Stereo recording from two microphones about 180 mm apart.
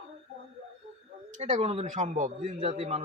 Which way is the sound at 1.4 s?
40° right (ahead or behind).